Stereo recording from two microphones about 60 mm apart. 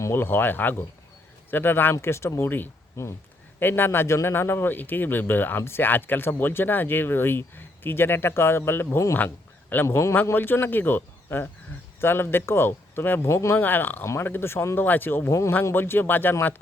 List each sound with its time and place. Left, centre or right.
0.2 s speech: left
3.6 s speech: left
9.1 s a sound: left
9.8 s speech: left
10.3 s speech: left
13.2 s speech: left
13.6 s speech: left
14.0 s speech: left
14.3 s speech: left
14.8 s speech: left
15.3 s speech: left
15.7 s speech: left